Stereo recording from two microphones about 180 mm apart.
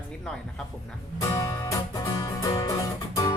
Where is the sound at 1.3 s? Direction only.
15° left (ahead or behind).